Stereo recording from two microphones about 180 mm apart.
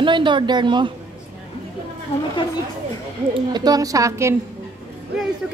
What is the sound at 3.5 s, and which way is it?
Speech, 20° right (ahead or behind).